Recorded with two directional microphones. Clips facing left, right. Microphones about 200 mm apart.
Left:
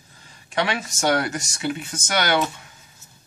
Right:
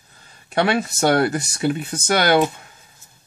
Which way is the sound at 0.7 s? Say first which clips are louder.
Right 4 dB; 35° right (ahead or behind).